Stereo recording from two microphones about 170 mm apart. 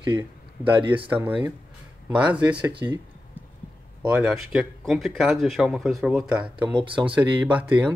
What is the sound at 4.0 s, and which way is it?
Speech, 5° right (ahead or behind).